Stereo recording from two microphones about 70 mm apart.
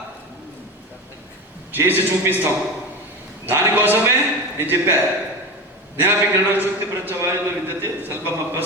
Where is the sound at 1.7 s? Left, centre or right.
Right.